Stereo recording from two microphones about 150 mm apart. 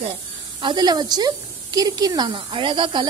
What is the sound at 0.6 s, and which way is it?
A woman's voice, 30° right (ahead or behind).